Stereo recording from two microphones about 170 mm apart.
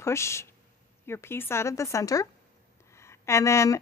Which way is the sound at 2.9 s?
15° left (ahead or behind).